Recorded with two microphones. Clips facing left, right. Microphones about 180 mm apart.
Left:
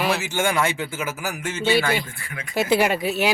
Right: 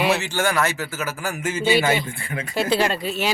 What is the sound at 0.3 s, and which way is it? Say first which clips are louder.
Speech: even; 10° left (ahead or behind).